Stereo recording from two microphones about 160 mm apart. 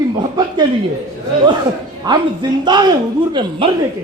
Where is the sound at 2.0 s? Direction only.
25° right (ahead or behind).